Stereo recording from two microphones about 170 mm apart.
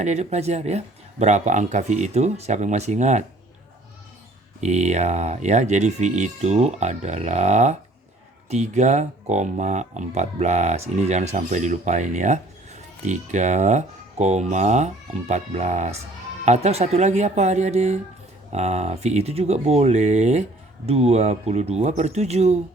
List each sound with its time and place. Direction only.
0.0 s speech: 40° right (ahead or behind)
4.6 s speech: 40° right (ahead or behind)